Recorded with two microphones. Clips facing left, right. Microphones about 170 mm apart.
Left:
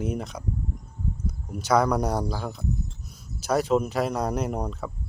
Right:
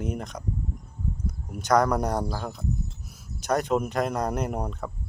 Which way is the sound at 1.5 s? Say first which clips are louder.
Even; 5° left (ahead or behind).